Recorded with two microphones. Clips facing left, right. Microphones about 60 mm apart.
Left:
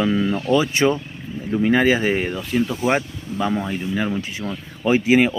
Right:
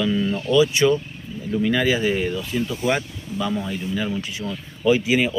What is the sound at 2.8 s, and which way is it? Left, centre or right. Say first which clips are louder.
Speech: left 2 dB; left.